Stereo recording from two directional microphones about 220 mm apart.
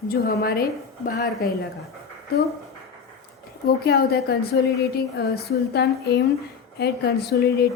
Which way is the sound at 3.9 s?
45° left (ahead or behind).